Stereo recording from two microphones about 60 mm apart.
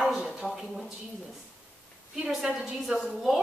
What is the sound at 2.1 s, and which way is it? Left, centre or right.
A woman's voice, centre.